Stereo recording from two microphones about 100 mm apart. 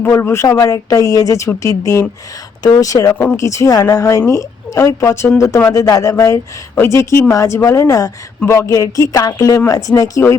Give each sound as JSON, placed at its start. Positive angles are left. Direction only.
{"t": 0.0, "sound": "speech", "side_deg": 25}